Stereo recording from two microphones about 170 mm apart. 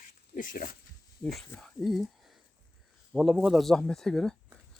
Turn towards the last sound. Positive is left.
turn(degrees=0)  # may be behind; listen again after turning